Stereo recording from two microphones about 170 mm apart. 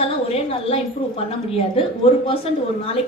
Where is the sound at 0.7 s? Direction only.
35° left (ahead or behind).